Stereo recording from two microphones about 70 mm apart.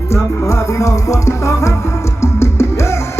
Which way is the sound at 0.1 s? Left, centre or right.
Left.